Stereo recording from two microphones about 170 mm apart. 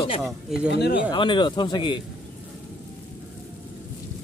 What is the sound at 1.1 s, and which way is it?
Speech, 30° left (ahead or behind).